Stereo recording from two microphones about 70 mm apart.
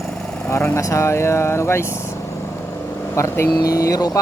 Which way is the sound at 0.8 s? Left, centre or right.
Left.